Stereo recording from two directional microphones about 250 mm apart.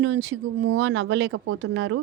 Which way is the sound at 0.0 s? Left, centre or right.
Right.